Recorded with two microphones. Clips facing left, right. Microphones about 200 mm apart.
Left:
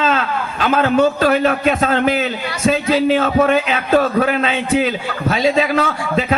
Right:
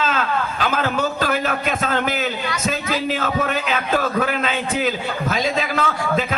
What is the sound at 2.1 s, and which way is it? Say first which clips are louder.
Speech: left 5 dB; 40° right (ahead or behind).